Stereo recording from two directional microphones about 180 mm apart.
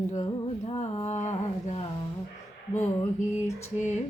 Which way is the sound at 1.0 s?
40° left (ahead or behind).